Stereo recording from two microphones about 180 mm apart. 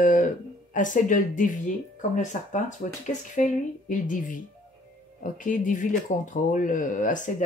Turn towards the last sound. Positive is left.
turn(degrees=45)  # may be behind; listen again after turning